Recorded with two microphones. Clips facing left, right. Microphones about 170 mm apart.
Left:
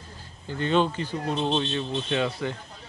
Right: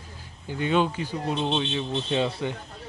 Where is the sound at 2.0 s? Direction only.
25° right (ahead or behind).